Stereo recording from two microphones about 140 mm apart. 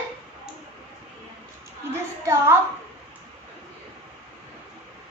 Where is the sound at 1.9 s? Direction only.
20° right (ahead or behind).